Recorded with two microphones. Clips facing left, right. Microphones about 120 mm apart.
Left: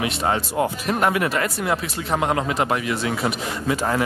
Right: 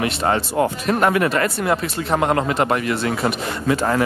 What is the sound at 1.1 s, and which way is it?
Speech, 50° right (ahead or behind).